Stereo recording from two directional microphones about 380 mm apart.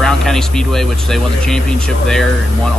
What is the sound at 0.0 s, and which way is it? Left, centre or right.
Speech, centre.